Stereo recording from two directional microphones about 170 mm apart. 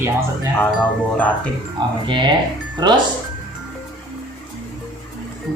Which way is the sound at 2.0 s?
25° right (ahead or behind).